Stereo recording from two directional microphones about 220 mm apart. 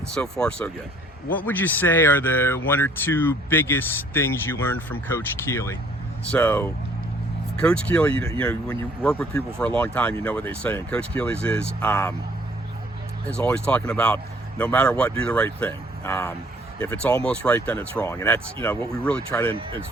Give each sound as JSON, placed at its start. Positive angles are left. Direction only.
{"t": 0.1, "sound": "speech", "side_deg": 5}
{"t": 13.3, "sound": "speech", "side_deg": 5}